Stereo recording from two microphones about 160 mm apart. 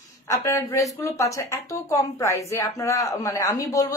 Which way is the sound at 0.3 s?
20° left (ahead or behind).